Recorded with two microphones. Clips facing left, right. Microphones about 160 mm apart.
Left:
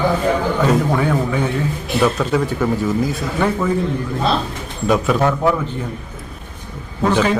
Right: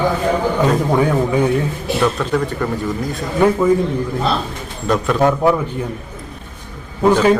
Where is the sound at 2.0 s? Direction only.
Centre (ahead or behind).